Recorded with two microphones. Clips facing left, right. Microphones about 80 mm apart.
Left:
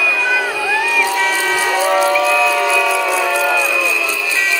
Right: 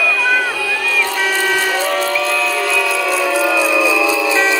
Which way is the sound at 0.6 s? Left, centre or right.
Centre.